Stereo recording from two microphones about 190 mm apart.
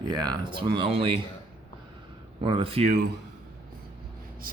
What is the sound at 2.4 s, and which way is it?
Speech, 30° right (ahead or behind).